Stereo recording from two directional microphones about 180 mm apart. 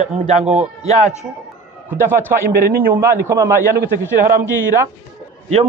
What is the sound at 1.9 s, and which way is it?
A man's voice, 10° right (ahead or behind).